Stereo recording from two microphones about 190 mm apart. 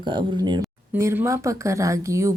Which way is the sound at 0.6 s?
10° right (ahead or behind).